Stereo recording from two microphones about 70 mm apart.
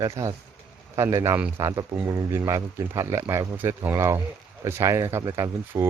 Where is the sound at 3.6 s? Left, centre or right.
Right.